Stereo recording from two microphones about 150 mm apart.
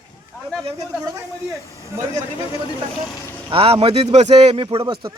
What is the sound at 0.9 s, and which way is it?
Speech, 25° right (ahead or behind).